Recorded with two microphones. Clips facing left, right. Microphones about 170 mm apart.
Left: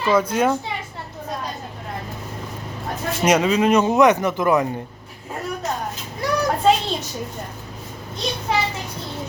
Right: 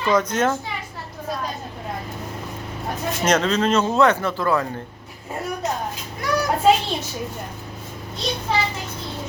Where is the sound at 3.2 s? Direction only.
10° left (ahead or behind).